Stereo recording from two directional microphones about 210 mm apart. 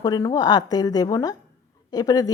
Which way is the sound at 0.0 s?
20° left (ahead or behind).